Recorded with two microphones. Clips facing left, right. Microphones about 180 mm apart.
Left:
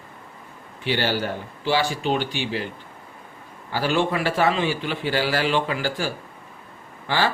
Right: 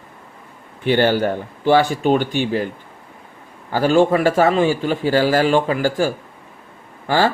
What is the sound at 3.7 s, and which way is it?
A man's voice, 45° right (ahead or behind).